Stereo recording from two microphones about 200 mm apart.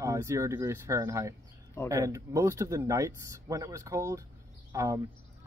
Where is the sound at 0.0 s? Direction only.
15° right (ahead or behind).